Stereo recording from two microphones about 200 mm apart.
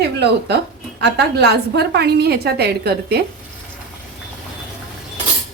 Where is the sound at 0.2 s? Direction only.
55° right (ahead or behind).